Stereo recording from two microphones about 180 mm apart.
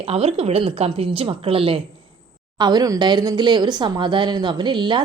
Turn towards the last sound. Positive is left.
turn(degrees=-25)  # may be behind; listen again after turning